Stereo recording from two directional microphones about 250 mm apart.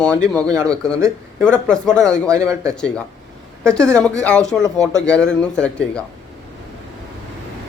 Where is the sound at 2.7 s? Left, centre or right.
Centre.